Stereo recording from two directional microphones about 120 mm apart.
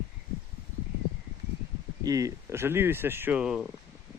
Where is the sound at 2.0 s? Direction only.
30° right (ahead or behind).